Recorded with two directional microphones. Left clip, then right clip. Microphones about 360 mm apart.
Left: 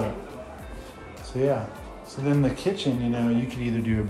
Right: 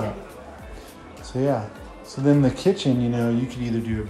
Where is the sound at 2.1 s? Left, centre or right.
Centre.